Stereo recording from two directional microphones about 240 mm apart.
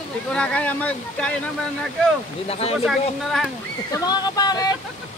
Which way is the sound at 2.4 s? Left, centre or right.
Left.